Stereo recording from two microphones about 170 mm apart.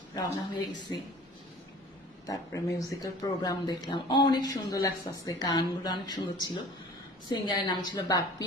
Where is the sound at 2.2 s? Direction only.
20° left (ahead or behind).